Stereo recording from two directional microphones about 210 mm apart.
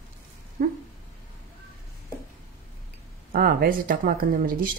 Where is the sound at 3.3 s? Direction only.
40° right (ahead or behind).